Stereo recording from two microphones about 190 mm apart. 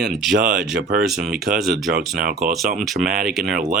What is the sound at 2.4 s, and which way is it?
Speech, centre (ahead or behind).